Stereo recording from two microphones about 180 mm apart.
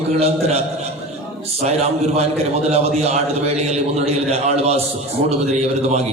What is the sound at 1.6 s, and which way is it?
A man's voice, 35° right (ahead or behind).